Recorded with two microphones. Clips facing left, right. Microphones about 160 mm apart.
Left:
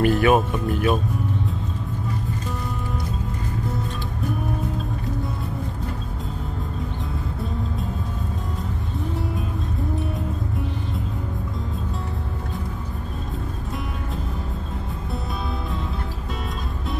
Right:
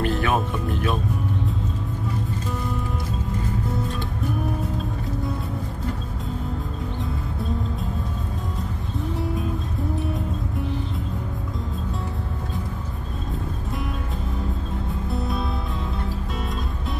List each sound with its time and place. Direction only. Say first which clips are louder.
0.0 s music: left 5 dB; 5° left (ahead or behind)
9.9 s music: right 1 dB; centre (ahead or behind)